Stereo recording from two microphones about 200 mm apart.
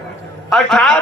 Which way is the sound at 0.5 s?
5° left (ahead or behind).